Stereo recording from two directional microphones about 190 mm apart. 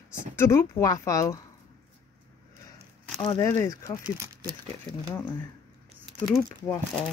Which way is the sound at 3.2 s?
20° left (ahead or behind).